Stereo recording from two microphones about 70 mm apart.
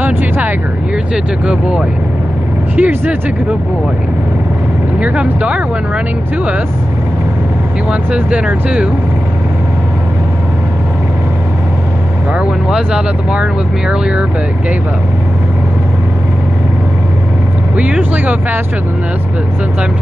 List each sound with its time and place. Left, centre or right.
0.0 s vehicle: right
1.1 s speech: centre
2.7 s speech: right
5.0 s speech: centre
7.9 s speech: centre
12.6 s speech: centre
17.7 s speech: centre